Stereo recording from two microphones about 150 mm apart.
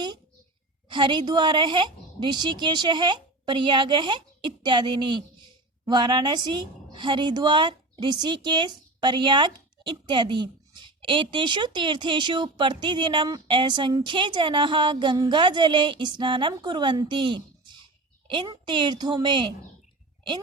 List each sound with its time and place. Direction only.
0.9 s a woman's voice: 30° right (ahead or behind)